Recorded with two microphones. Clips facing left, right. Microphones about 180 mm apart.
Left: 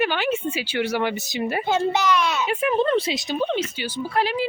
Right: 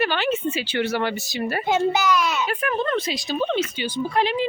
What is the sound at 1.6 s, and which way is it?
Speech, 5° right (ahead or behind).